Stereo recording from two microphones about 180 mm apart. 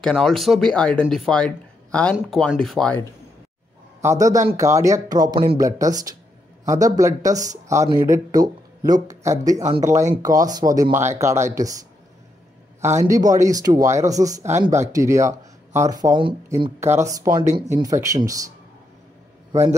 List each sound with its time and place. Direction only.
0.0 s speech: 5° left (ahead or behind)
4.0 s speech: 15° right (ahead or behind)
12.8 s speech: 15° right (ahead or behind)